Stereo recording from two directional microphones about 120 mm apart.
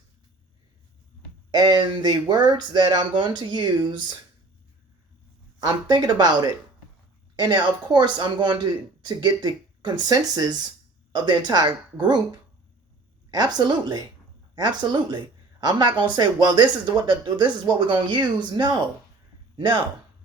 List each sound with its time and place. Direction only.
1.5 s speech: 35° right (ahead or behind)
5.5 s speech: 35° right (ahead or behind)
13.3 s speech: 35° right (ahead or behind)